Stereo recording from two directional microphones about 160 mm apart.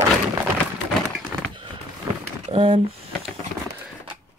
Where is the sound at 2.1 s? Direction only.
25° right (ahead or behind).